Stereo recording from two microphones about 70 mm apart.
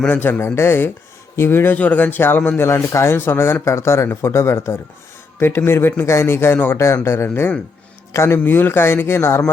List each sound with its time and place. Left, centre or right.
0.1 s speech: left
1.8 s a man's voice: left
2.6 s speech: left